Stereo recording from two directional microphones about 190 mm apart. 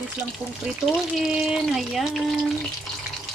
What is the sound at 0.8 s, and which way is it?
Speech, centre (ahead or behind).